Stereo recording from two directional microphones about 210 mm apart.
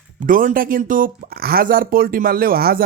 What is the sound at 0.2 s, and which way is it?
Speech, 40° right (ahead or behind).